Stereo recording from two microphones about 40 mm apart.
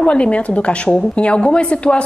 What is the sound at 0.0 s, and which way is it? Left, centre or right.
A woman's voice, left.